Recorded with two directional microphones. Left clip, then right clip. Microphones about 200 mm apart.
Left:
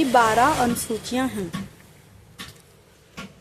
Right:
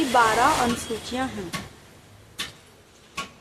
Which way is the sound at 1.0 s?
45° left (ahead or behind).